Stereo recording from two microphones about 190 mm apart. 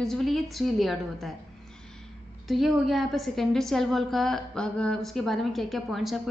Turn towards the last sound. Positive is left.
turn(degrees=0)  # may be behind; listen again after turning